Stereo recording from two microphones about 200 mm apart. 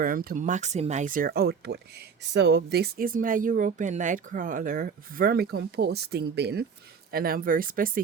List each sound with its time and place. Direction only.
0.0 s speech: 45° right (ahead or behind)